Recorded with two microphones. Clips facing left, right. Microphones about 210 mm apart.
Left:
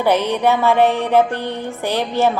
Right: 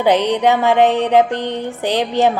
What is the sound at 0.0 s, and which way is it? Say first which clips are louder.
Music: right 2 dB; 15° right (ahead or behind).